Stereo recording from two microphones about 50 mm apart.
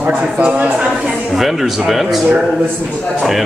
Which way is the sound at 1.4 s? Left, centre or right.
Centre.